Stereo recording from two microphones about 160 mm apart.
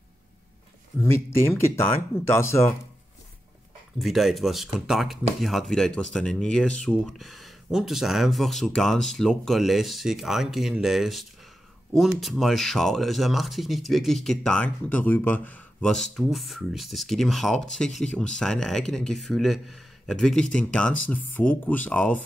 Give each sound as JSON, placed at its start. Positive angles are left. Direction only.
{"t": 1.0, "sound": "speech", "side_deg": 15}
{"t": 4.0, "sound": "speech", "side_deg": 0}